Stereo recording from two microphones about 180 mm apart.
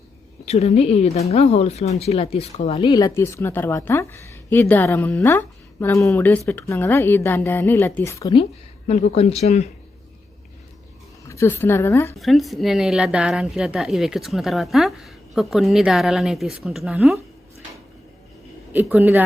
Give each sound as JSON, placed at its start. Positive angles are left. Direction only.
{"t": 0.4, "sound": "speech", "side_deg": 40}
{"t": 2.9, "sound": "a woman's voice", "side_deg": 15}
{"t": 8.9, "sound": "speech", "side_deg": 35}
{"t": 11.3, "sound": "a woman's voice", "side_deg": 15}
{"t": 12.1, "sound": "a woman's voice", "side_deg": 0}
{"t": 18.7, "sound": "a man's voice", "side_deg": -10}